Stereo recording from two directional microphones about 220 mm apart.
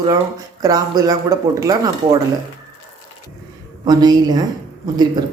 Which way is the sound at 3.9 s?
20° right (ahead or behind).